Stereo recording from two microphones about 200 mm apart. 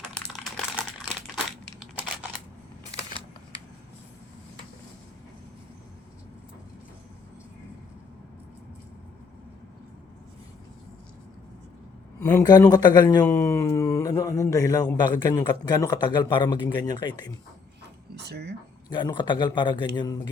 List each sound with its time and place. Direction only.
0.1 s typing: 5° left (ahead or behind)
12.2 s a man's voice: 20° left (ahead or behind)
13.2 s a sound: 15° left (ahead or behind)
14.9 s a man's voice: 20° left (ahead or behind)
18.1 s speech: 55° right (ahead or behind)
18.9 s a man's voice: 20° left (ahead or behind)